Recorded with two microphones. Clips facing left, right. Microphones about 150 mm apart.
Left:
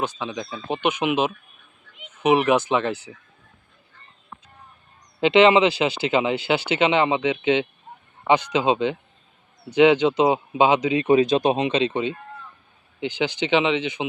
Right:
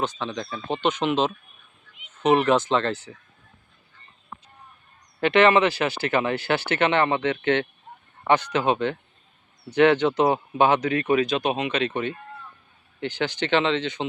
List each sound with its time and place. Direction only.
0.0 s speech: 10° left (ahead or behind)
5.2 s speech: 20° left (ahead or behind)